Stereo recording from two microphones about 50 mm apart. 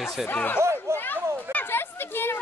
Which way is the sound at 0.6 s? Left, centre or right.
Right.